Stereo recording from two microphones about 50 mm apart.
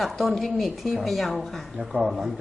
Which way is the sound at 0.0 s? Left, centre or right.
Centre.